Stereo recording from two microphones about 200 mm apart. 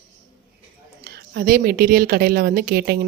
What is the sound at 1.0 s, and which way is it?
A woman's voice, 50° right (ahead or behind).